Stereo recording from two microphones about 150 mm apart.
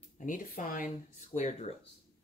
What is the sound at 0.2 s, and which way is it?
Speech, 60° left (ahead or behind).